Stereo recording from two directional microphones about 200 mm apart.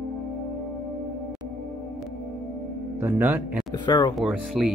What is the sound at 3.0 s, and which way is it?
Speech, 10° right (ahead or behind).